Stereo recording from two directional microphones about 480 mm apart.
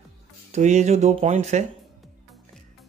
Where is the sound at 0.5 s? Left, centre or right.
Centre.